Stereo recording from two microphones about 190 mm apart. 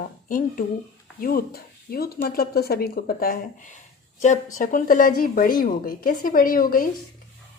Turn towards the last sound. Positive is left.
turn(degrees=50)  # may be behind; listen again after turning